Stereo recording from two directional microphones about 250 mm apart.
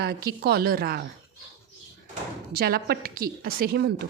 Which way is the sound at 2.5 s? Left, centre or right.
Right.